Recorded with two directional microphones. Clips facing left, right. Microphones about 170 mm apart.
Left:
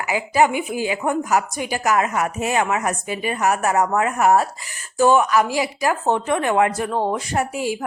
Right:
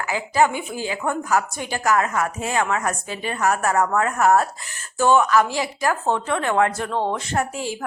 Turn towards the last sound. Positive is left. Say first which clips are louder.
# left 2 dB
turn(degrees=10)  # may be behind; listen again after turning